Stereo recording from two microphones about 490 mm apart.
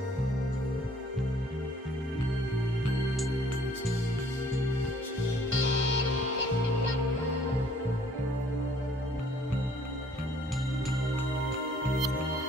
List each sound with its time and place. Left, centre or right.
5.5 s music: right